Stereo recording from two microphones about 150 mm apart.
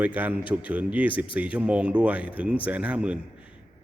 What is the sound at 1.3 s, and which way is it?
A man's voice, 10° right (ahead or behind).